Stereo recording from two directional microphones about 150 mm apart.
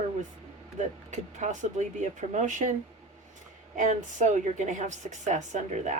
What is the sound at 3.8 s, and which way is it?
A woman's voice, 55° right (ahead or behind).